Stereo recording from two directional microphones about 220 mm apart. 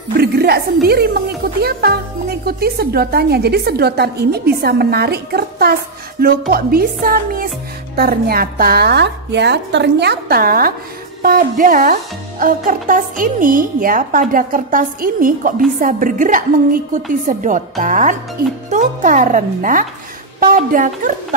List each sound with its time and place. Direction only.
0.2 s a woman's voice: 45° right (ahead or behind)